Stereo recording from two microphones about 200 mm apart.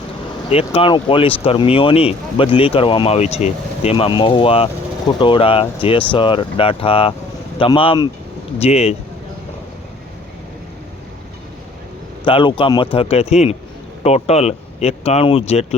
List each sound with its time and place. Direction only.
0.5 s speech: 30° left (ahead or behind)
12.2 s speech: 25° left (ahead or behind)